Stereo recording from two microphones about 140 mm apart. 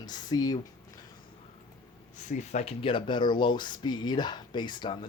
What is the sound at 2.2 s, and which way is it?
Speech, 60° left (ahead or behind).